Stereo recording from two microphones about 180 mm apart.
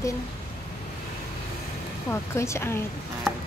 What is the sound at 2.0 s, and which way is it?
Speech, 15° left (ahead or behind).